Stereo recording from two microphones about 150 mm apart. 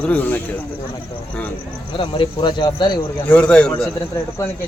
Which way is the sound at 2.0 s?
30° left (ahead or behind).